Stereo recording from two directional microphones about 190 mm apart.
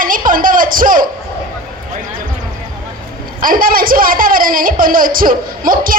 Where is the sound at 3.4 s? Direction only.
45° right (ahead or behind).